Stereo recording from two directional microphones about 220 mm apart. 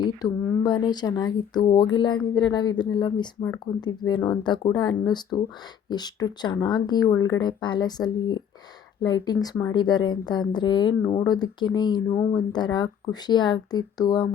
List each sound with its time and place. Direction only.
0.0 s speech: 20° left (ahead or behind)